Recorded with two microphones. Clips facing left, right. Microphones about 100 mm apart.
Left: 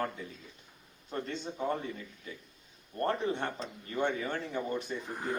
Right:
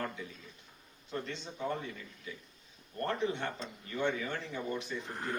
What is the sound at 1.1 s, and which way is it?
Speech, 40° left (ahead or behind).